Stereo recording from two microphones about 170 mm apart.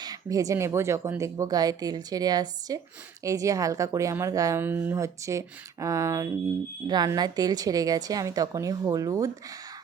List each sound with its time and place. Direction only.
0.0 s speech: 20° right (ahead or behind)